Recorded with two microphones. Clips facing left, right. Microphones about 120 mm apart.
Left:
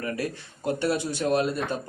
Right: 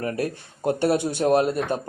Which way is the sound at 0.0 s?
50° right (ahead or behind).